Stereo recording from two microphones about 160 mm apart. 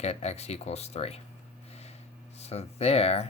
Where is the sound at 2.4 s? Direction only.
40° left (ahead or behind).